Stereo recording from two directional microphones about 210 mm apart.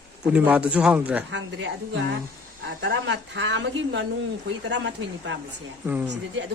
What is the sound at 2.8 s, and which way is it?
A woman's voice, 55° right (ahead or behind).